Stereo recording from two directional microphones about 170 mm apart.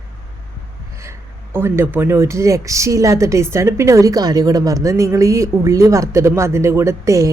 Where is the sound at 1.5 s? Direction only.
15° right (ahead or behind).